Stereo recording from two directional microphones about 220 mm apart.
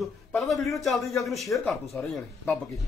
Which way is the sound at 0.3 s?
Centre (ahead or behind).